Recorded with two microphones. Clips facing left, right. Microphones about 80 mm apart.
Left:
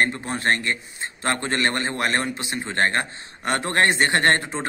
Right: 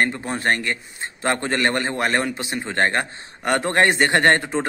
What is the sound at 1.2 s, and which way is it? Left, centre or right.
A man's voice, centre.